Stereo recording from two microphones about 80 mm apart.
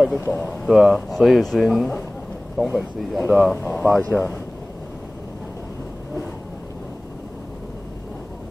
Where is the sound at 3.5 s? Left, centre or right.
Centre.